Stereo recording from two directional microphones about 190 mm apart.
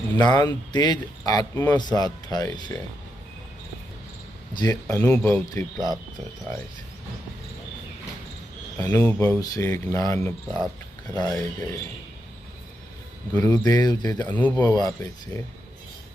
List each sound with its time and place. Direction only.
0.2 s speech: 20° left (ahead or behind)
4.6 s speech: 20° left (ahead or behind)
5.7 s speech: centre (ahead or behind)
8.8 s speech: 10° left (ahead or behind)
13.3 s speech: 10° left (ahead or behind)
13.6 s speech: 20° left (ahead or behind)
14.3 s speech: 10° left (ahead or behind)